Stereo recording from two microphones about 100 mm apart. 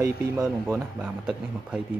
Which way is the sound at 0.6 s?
10° right (ahead or behind).